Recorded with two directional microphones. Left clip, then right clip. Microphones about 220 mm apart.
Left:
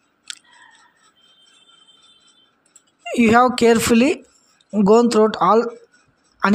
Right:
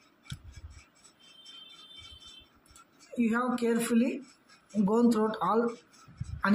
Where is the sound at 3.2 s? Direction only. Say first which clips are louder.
Left 16 dB; 45° left (ahead or behind).